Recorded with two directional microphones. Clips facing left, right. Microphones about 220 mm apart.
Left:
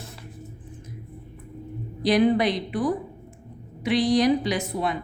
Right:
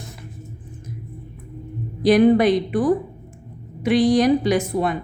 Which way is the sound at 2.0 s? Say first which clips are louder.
Right 6 dB; 50° right (ahead or behind).